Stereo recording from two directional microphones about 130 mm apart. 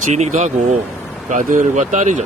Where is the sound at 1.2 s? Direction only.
85° right.